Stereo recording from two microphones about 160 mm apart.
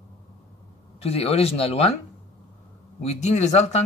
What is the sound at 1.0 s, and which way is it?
Speech, 40° left (ahead or behind).